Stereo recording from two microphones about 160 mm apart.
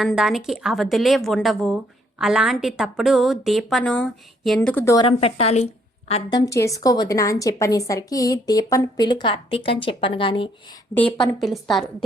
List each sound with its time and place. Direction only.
0.0 s a woman's voice: centre (ahead or behind)
4.9 s a woman's voice: 35° left (ahead or behind)
6.3 s a woman's voice: 20° left (ahead or behind)
11.3 s a woman's voice: centre (ahead or behind)